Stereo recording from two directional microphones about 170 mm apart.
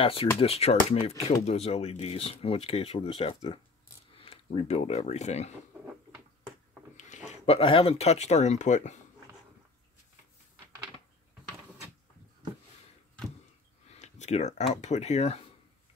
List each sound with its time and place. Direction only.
0.0 s speech: 35° left (ahead or behind)
7.0 s speech: 40° left (ahead or behind)
13.9 s speech: 40° left (ahead or behind)